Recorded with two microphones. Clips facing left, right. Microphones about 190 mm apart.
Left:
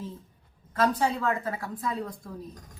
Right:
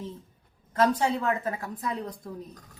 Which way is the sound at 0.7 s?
25° right (ahead or behind).